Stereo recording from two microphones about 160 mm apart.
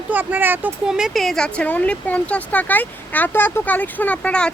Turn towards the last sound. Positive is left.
turn(degrees=5)  # may be behind; listen again after turning